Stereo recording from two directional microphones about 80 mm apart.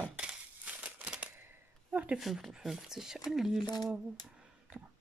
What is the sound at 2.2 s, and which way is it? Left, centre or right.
Speech, centre.